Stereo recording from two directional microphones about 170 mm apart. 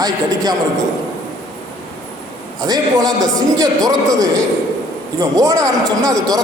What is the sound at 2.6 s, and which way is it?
A man's voice, 25° right (ahead or behind).